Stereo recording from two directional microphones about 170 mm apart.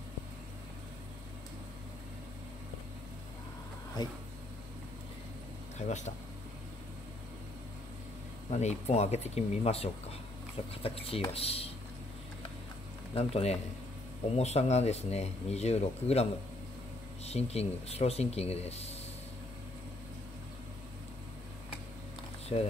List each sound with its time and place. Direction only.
4.0 s speech: 25° left (ahead or behind)
5.8 s speech: 45° left (ahead or behind)
8.5 s speech: 40° left (ahead or behind)
13.1 s speech: 35° left (ahead or behind)
22.5 s speech: 35° left (ahead or behind)